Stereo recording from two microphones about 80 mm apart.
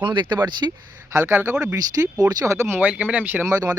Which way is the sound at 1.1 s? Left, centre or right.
Right.